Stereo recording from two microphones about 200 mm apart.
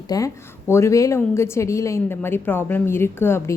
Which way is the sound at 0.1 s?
20° left (ahead or behind).